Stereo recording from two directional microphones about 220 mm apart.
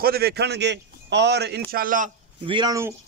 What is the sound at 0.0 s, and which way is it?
A man's voice, 45° right (ahead or behind).